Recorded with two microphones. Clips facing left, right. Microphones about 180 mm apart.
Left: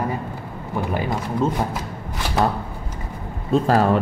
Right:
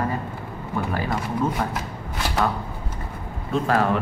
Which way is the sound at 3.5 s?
35° left (ahead or behind).